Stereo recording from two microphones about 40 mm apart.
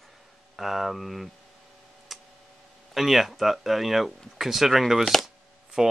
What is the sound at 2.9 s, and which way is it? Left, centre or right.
Speech, centre.